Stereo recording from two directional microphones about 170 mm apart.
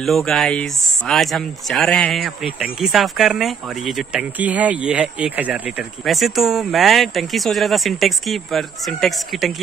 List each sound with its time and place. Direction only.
0.0 s speech: centre (ahead or behind)